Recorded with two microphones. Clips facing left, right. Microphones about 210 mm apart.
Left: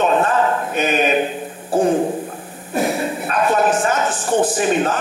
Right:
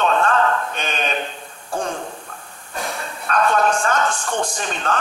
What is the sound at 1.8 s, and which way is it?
Speech, 20° left (ahead or behind).